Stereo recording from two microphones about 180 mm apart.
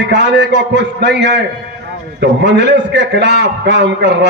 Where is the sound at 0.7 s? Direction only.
75° right (ahead or behind).